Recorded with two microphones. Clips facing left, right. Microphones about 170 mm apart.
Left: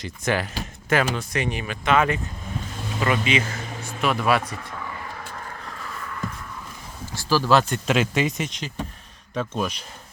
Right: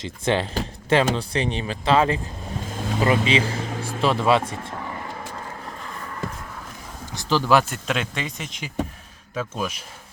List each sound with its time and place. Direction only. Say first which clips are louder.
0.0 s speech: right 2 dB; 25° right (ahead or behind)
7.1 s speech: even; 20° right (ahead or behind)
7.9 s speech: left 5 dB; 5° left (ahead or behind)